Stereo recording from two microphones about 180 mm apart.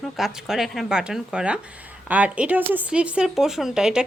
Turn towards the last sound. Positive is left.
turn(degrees=-5)  # may be behind; listen again after turning